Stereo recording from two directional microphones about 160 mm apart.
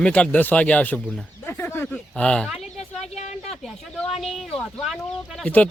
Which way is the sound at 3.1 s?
45° left (ahead or behind).